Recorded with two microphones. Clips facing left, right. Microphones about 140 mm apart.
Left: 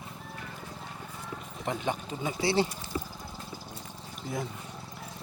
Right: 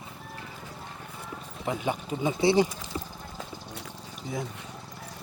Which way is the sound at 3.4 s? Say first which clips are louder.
Right 3 dB; 90° right.